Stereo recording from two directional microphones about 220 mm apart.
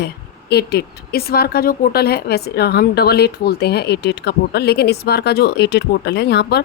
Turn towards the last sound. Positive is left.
turn(degrees=50)  # may be behind; listen again after turning